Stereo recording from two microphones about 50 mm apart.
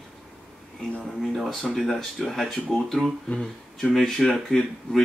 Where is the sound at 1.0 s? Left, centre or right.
Centre.